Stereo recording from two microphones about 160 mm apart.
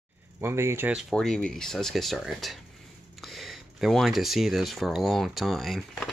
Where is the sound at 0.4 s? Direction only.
15° right (ahead or behind).